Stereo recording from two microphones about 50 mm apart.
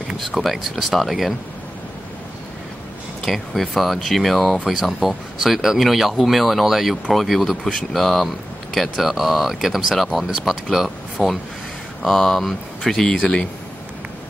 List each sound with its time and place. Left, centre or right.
0.4 s speech: centre
3.3 s speech: centre
12.0 s speech: centre